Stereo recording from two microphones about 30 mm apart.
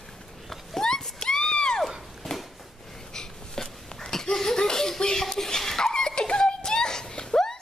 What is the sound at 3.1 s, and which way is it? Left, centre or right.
Laughter, centre.